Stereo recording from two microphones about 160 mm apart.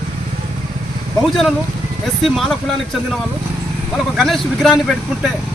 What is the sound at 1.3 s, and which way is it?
A man's voice, centre (ahead or behind).